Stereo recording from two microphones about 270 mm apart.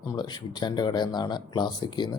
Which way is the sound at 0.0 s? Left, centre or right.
Centre.